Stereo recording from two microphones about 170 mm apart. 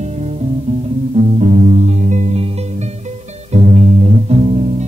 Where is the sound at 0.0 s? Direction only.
40° right (ahead or behind).